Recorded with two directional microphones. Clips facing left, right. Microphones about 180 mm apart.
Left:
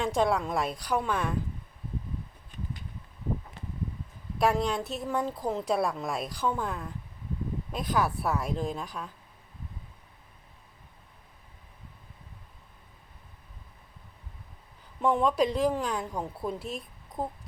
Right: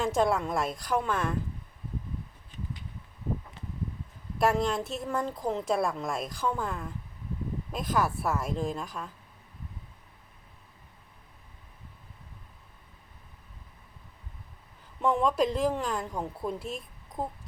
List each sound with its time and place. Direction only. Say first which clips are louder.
0.0 s a woman's voice: even; centre (ahead or behind)
4.4 s a woman's voice: even; centre (ahead or behind)
15.0 s a woman's voice: left 1 dB; centre (ahead or behind)